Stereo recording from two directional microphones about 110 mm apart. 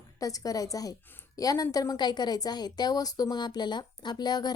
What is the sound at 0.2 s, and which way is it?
A woman's voice, 30° left (ahead or behind).